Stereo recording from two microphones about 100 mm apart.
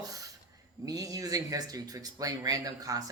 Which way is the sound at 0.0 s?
35° right (ahead or behind).